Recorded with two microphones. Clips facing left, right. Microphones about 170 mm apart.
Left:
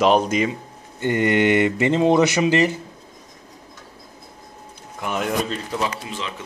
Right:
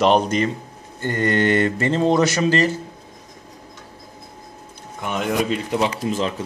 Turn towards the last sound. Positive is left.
turn(degrees=-40)  # may be behind; listen again after turning